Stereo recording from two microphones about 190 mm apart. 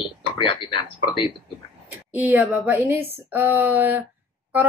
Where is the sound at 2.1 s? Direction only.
10° right (ahead or behind).